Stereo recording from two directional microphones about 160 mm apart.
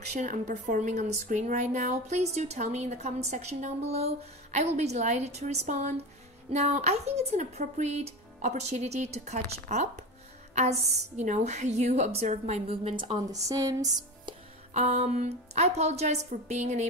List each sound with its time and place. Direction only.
0.0 s speech: 50° right (ahead or behind); by 14.3 s 20° right (ahead or behind)
14.7 s speech: 45° right (ahead or behind)